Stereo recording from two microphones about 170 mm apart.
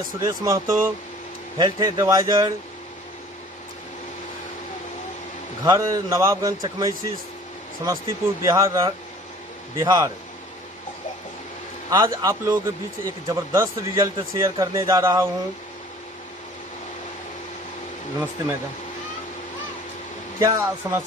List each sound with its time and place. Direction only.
0.2 s speech: 20° right (ahead or behind)
5.6 s speech: 20° right (ahead or behind)
11.9 s speech: 25° right (ahead or behind)
20.3 s speech: 20° right (ahead or behind)